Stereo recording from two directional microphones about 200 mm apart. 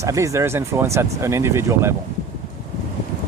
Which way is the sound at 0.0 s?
15° right (ahead or behind).